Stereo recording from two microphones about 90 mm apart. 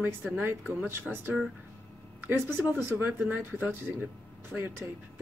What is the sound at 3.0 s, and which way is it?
Speech, 20° right (ahead or behind).